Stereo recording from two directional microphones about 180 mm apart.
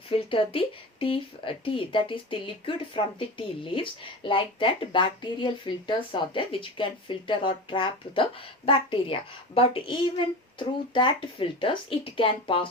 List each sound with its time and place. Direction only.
0.1 s speech: 30° left (ahead or behind)